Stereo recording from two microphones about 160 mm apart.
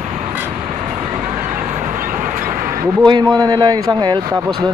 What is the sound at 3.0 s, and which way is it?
A man's voice, 25° right (ahead or behind).